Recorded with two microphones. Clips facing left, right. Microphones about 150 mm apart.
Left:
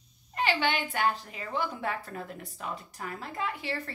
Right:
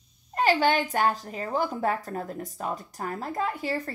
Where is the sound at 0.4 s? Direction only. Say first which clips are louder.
Right 6 dB; 40° right (ahead or behind).